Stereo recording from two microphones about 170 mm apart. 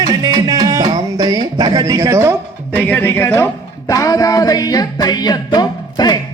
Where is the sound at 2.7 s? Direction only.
10° left (ahead or behind).